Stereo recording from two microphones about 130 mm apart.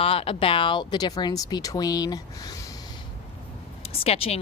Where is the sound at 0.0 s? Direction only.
45° left (ahead or behind); by 2.1 s 30° left (ahead or behind).